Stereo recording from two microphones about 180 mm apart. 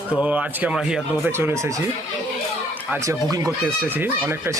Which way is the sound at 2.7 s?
10° right (ahead or behind).